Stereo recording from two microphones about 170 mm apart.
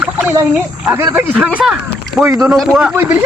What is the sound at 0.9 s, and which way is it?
Speech, 10° right (ahead or behind).